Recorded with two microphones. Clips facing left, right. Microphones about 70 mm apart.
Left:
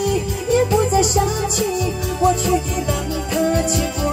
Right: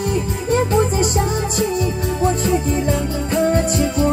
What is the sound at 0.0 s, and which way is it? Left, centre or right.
Music, right.